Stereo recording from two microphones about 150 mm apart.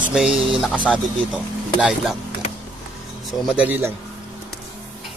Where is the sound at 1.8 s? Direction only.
Centre (ahead or behind).